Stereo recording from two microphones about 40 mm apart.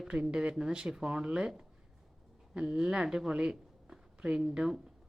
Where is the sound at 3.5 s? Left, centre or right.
Centre.